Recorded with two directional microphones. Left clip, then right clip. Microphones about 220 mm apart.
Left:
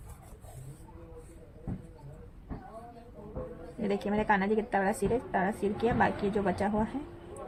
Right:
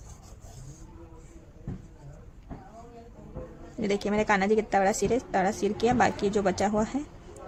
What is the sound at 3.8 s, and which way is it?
A woman's voice, 40° right (ahead or behind).